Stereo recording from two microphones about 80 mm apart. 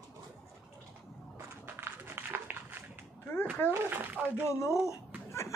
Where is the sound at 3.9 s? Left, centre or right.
Right.